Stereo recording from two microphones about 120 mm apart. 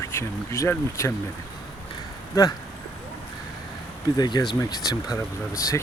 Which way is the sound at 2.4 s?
25° left (ahead or behind).